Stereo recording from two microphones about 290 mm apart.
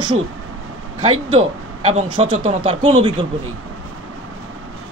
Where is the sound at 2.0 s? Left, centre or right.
Centre.